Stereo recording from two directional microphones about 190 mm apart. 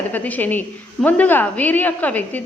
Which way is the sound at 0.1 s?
10° left (ahead or behind).